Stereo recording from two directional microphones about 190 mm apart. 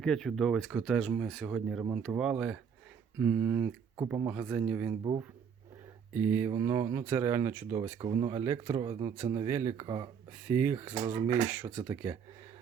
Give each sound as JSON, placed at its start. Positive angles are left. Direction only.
{"t": 0.0, "sound": "speech", "side_deg": 5}
{"t": 6.1, "sound": "speech", "side_deg": -10}
{"t": 7.9, "sound": "speech", "side_deg": -25}
{"t": 9.5, "sound": "speech", "side_deg": -15}
{"t": 10.5, "sound": "speech", "side_deg": -10}